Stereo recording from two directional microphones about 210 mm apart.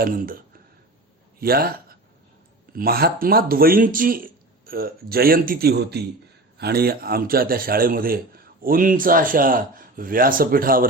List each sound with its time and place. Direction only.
0.0 s a man's voice: 45° right (ahead or behind)